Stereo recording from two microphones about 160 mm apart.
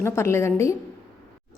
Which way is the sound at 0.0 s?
15° left (ahead or behind).